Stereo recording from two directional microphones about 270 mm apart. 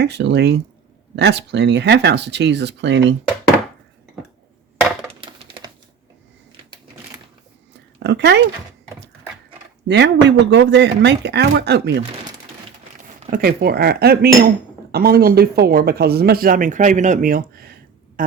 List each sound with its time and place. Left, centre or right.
0.0 s speech: right
5.2 s a sound: centre
7.9 s speech: right
9.8 s speech: right
13.1 s speech: right
18.2 s a sound: right